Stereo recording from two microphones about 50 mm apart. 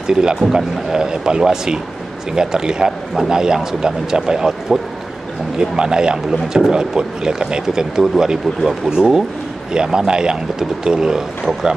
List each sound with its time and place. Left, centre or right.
0.0 s speech: centre